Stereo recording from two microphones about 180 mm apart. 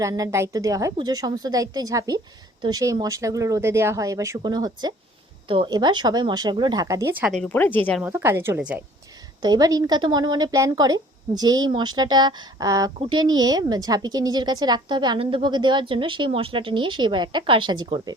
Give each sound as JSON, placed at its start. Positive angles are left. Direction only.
{"t": 0.0, "sound": "a woman's voice", "side_deg": -15}
{"t": 7.3, "sound": "speech", "side_deg": 10}
{"t": 8.0, "sound": "a woman's voice", "side_deg": -10}
{"t": 9.4, "sound": "a woman's voice", "side_deg": -20}